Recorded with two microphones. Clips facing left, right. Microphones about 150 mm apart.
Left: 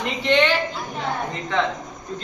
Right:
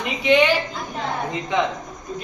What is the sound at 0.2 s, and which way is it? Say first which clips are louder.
A woman's voice: right 2 dB; 10° right (ahead or behind).